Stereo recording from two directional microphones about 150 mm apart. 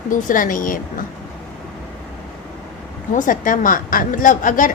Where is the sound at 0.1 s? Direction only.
60° left (ahead or behind).